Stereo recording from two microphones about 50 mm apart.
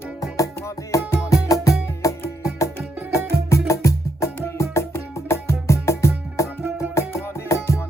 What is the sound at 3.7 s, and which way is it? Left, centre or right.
Music, left.